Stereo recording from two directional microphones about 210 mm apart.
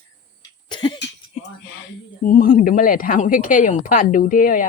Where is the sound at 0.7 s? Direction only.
20° left (ahead or behind).